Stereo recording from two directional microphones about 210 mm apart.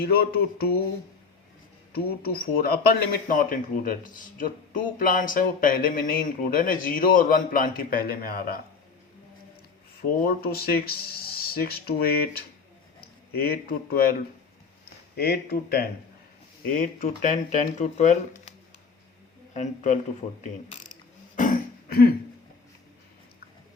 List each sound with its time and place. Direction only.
0.0 s speech: 45° left (ahead or behind)
1.9 s a man's voice: 45° left (ahead or behind)
10.2 s speech: 45° left (ahead or behind)
13.4 s a man's voice: 45° left (ahead or behind)
19.5 s a man's voice: 35° left (ahead or behind)
21.3 s throat clearing: 40° left (ahead or behind)